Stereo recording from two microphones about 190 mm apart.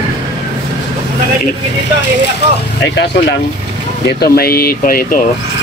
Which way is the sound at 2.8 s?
65° left (ahead or behind).